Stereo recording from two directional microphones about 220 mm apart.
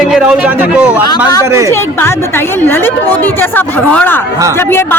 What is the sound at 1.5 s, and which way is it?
Speech, 15° right (ahead or behind).